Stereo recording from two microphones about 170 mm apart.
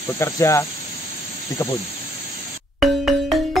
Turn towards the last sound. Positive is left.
turn(degrees=0)  # may be behind; listen again after turning